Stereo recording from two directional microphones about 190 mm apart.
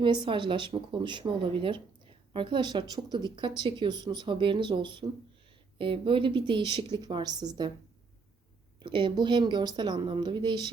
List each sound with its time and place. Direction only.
0.0 s speech: 25° right (ahead or behind)
8.8 s speech: 25° right (ahead or behind)